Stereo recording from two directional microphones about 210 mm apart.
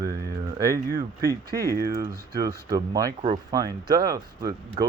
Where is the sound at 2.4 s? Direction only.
15° right (ahead or behind).